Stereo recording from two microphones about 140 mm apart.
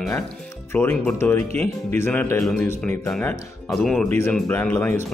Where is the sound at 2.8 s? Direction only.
5° left (ahead or behind).